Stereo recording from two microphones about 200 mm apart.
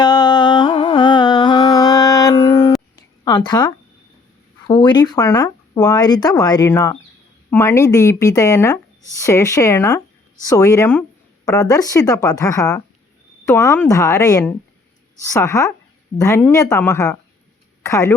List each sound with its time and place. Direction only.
0.0 s carnatic music: 20° left (ahead or behind)
2.9 s a sound: 20° left (ahead or behind)
4.6 s speech: 20° left (ahead or behind)